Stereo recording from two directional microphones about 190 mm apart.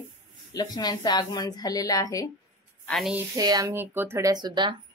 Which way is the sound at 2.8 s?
Centre (ahead or behind).